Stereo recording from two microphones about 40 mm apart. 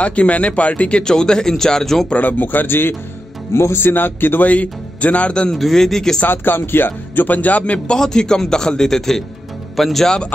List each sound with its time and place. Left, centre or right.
0.0 s a man's voice: left; by 2.0 s centre
2.1 s speech: left
4.5 s speech: left
5.6 s a man's voice: centre
6.2 s speech: left
7.2 s speech: left
7.9 s a man's voice: centre